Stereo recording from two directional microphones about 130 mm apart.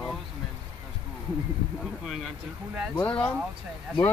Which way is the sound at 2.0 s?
Centre (ahead or behind).